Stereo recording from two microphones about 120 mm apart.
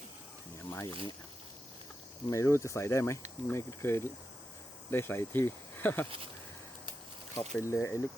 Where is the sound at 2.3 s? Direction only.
25° left (ahead or behind).